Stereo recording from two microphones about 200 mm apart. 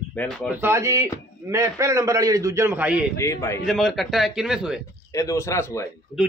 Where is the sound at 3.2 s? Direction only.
15° left (ahead or behind).